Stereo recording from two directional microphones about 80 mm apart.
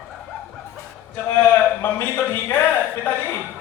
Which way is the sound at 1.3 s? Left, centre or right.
Left.